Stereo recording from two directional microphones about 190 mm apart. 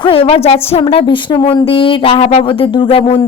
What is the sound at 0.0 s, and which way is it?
A woman's voice, 30° left (ahead or behind).